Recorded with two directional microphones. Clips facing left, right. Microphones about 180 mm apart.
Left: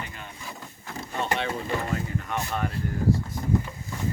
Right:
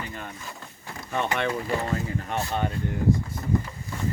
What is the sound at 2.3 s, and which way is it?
Speech, 30° right (ahead or behind).